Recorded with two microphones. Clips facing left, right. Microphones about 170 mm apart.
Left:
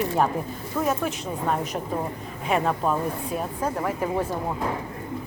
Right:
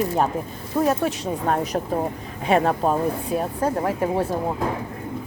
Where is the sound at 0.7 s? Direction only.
30° right (ahead or behind).